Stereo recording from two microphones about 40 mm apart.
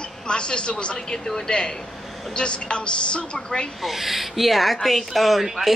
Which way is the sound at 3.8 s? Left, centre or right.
Centre.